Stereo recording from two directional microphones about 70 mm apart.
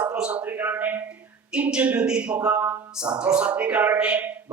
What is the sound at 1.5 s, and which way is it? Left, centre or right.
A man's voice, centre.